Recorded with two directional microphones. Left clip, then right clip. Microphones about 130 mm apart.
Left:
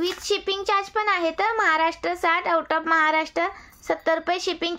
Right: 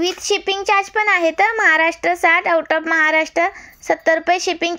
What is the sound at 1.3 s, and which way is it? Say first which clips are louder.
Speech: right 7 dB; 25° right (ahead or behind).